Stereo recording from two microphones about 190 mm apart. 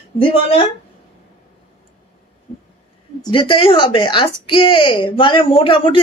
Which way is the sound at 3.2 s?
25° left (ahead or behind).